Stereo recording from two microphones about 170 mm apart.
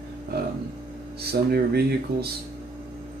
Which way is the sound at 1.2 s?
65° right (ahead or behind).